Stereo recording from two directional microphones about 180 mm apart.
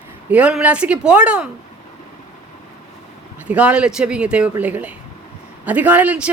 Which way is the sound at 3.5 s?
5° right (ahead or behind).